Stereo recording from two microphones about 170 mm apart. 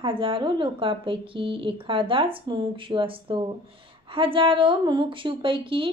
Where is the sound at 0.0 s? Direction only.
30° right (ahead or behind).